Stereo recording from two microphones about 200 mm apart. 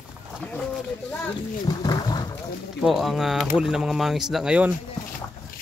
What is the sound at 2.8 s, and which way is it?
Speech, centre (ahead or behind).